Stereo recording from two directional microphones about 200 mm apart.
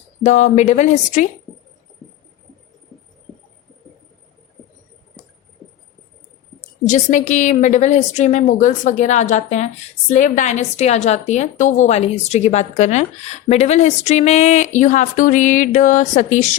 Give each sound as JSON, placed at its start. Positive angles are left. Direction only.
{"t": 0.2, "sound": "a woman's voice", "side_deg": 35}
{"t": 6.8, "sound": "a woman's voice", "side_deg": 40}